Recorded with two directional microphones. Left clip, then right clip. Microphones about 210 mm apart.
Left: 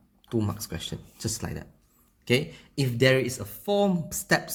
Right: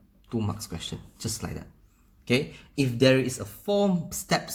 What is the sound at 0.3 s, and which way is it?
Speech, 35° left (ahead or behind).